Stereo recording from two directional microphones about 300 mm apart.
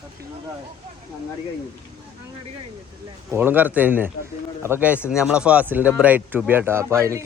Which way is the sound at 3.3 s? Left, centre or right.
Centre.